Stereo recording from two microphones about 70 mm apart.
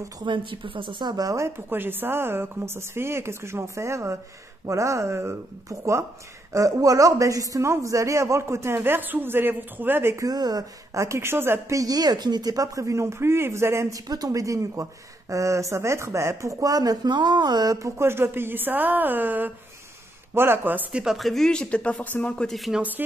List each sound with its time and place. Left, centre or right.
1.0 s speech: right
1.7 s a man's voice: right
10.3 s speech: right
10.9 s a man's voice: right
11.7 s speech: right
13.9 s speech: right
17.7 s a woman's voice: right
20.9 s speech: centre
22.8 s a woman's voice: right